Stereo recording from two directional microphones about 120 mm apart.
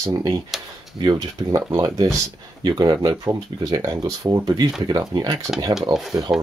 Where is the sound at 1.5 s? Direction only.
25° right (ahead or behind).